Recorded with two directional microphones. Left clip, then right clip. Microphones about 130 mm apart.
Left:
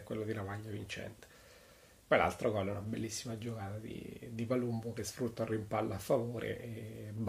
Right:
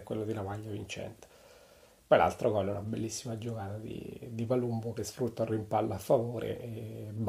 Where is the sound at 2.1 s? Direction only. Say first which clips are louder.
Right 5 dB; 15° right (ahead or behind).